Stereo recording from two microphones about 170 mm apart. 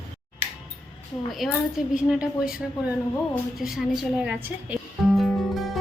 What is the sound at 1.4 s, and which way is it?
A woman's voice, centre (ahead or behind).